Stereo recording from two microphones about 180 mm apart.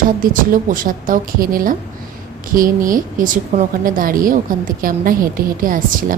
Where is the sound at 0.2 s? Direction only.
50° right (ahead or behind).